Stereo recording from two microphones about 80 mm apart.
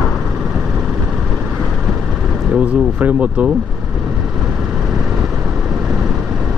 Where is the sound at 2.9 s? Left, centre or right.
Centre.